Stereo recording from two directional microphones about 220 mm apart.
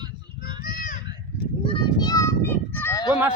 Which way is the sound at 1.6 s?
20° left (ahead or behind).